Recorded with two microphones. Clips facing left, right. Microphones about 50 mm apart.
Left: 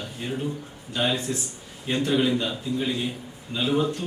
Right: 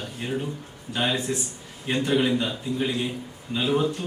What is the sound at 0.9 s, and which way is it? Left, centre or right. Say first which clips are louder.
Speech: even; centre.